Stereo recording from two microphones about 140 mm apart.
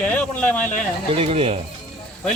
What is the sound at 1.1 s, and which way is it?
Speech, 45° right (ahead or behind).